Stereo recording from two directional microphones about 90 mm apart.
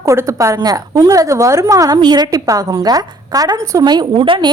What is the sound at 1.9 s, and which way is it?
A woman's voice, 50° right (ahead or behind).